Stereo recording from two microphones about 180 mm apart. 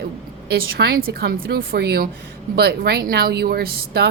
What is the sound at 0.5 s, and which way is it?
A woman's voice, 60° right (ahead or behind).